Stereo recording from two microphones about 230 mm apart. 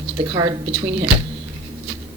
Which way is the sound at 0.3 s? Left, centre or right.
Centre.